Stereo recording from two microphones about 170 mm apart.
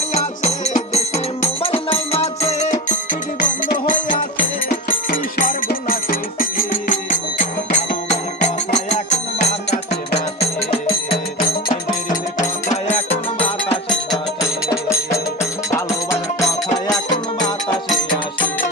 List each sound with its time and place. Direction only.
0.1 s music: 40° left (ahead or behind)
2.9 s music: 50° left (ahead or behind); by 11.5 s 30° left (ahead or behind)
12.7 s music: 40° left (ahead or behind)
14.7 s music: 15° left (ahead or behind)